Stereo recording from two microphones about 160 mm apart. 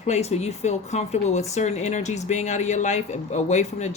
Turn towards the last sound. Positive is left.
turn(degrees=45)  # may be behind; listen again after turning